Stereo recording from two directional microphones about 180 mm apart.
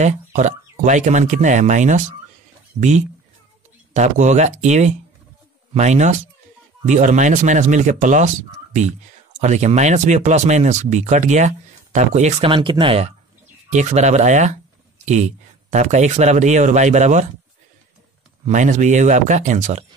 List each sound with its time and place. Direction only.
0.0 s speech: 40° right (ahead or behind)
18.4 s speech: 45° right (ahead or behind)